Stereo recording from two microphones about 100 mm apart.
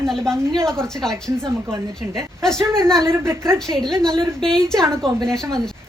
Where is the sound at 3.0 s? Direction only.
25° right (ahead or behind).